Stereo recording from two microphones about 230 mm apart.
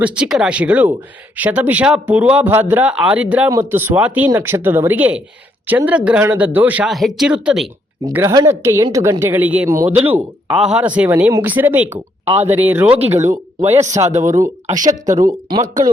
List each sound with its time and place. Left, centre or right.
0.0 s speech: centre
8.0 s speech: centre